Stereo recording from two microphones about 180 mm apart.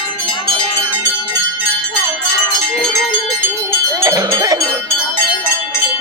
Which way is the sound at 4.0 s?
20° right (ahead or behind).